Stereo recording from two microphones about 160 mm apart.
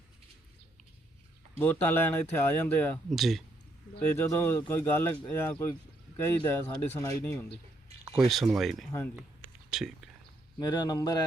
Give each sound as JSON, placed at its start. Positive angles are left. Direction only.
{"t": 1.5, "sound": "speech", "side_deg": 15}
{"t": 3.1, "sound": "speech", "side_deg": 0}
{"t": 4.2, "sound": "speech", "side_deg": 15}
{"t": 8.3, "sound": "speech", "side_deg": 0}
{"t": 10.6, "sound": "a man's voice", "side_deg": 25}